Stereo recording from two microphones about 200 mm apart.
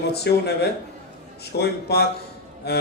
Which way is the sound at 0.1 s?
55° left (ahead or behind).